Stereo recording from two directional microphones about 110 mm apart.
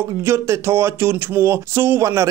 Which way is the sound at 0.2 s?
25° right (ahead or behind).